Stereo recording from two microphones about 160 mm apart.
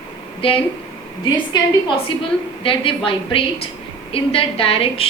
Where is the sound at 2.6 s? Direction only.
35° left (ahead or behind).